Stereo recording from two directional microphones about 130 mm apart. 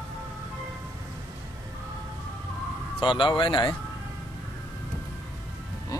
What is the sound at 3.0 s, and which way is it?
Speech, 40° left (ahead or behind).